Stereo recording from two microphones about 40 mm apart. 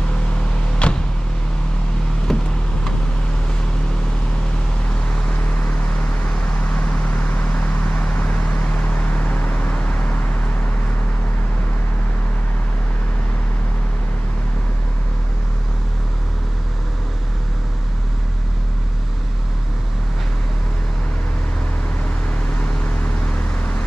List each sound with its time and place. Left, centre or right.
0.8 s a sound: left
2.3 s vehicle: centre
5.6 s vehicle: left
22.6 s vehicle: left